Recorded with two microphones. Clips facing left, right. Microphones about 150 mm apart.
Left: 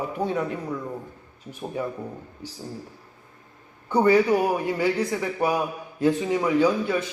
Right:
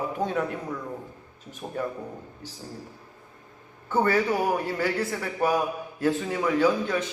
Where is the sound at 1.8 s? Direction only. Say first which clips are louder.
Even; 10° left (ahead or behind).